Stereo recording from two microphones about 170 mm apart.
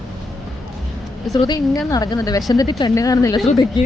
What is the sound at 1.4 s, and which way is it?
Speech, 25° left (ahead or behind).